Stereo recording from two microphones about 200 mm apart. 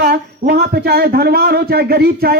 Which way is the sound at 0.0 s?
50° right (ahead or behind).